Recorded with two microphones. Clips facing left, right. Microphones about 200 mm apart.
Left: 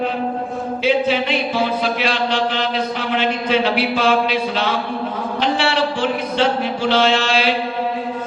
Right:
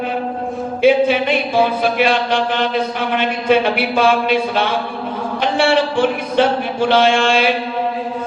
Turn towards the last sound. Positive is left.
turn(degrees=-55)  # may be behind; listen again after turning